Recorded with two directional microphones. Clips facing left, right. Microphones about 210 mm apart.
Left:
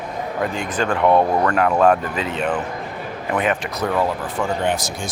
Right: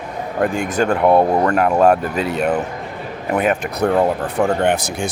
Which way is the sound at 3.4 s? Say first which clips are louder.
Right 4 dB; 45° right (ahead or behind).